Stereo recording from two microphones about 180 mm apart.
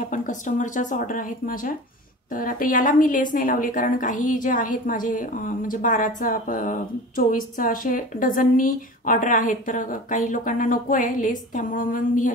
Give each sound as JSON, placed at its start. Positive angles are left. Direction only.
{"t": 0.1, "sound": "a woman's voice", "side_deg": 45}